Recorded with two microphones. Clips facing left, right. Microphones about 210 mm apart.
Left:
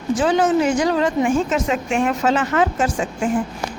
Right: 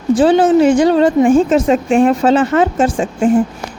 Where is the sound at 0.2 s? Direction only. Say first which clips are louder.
Right 7 dB; 30° right (ahead or behind).